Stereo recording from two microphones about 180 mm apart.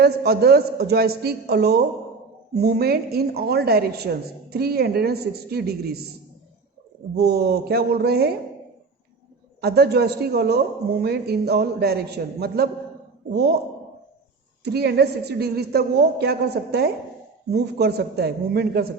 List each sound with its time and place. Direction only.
0.0 s a woman's voice: 65° right (ahead or behind)
7.2 s a woman's voice: 65° right (ahead or behind)
9.6 s a woman's voice: 65° right (ahead or behind)
14.6 s a woman's voice: 65° right (ahead or behind)